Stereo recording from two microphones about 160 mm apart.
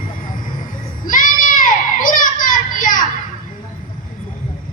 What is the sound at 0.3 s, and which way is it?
Vehicle, 60° left (ahead or behind).